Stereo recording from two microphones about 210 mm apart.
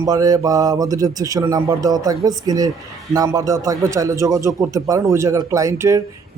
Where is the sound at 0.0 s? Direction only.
15° right (ahead or behind).